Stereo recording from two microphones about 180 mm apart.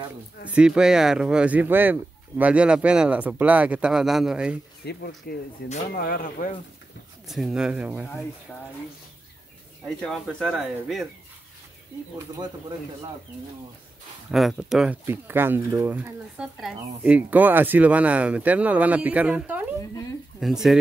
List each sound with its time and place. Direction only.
0.5 s speech: 5° right (ahead or behind)
4.8 s speech: 70° left (ahead or behind)
5.2 s speech: 55° left (ahead or behind)
7.2 s speech: 5° right (ahead or behind)
9.8 s speech: centre (ahead or behind)
12.2 s speech: 20° right (ahead or behind)
14.3 s speech: centre (ahead or behind)